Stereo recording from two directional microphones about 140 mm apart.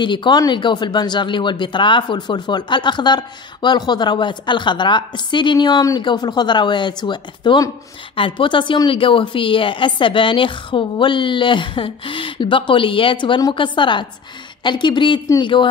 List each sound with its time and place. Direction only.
0.0 s speech: 35° left (ahead or behind)